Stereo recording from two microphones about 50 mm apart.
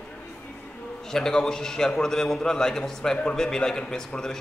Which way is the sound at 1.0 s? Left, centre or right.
Centre.